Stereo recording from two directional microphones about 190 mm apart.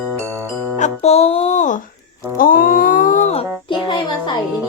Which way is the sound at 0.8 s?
35° left (ahead or behind).